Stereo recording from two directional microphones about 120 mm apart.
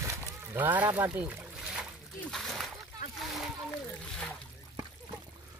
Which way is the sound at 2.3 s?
Centre (ahead or behind).